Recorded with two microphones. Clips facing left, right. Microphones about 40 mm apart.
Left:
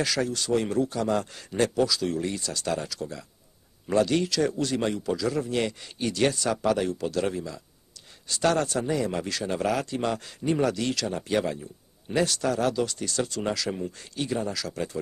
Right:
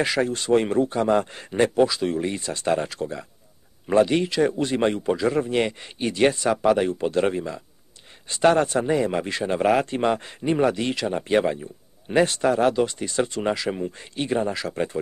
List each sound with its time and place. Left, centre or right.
0.0 s a man's voice: right